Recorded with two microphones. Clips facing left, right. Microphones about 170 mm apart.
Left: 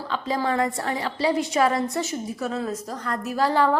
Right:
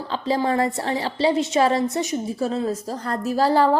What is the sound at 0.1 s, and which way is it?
A woman's voice, 30° right (ahead or behind).